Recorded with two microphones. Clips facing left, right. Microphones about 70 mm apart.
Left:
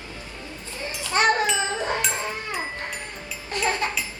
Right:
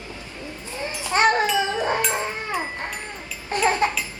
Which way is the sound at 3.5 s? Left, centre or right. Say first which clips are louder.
Right 5 dB; right.